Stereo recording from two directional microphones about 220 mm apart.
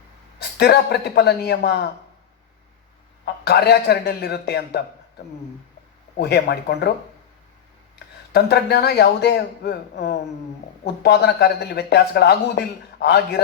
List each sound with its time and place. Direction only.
0.3 s speech: 45° left (ahead or behind)
3.4 s speech: 45° left (ahead or behind)
6.1 s speech: 45° left (ahead or behind)
7.9 s speech: 50° left (ahead or behind)